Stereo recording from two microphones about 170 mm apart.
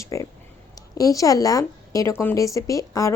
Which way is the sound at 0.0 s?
20° left (ahead or behind).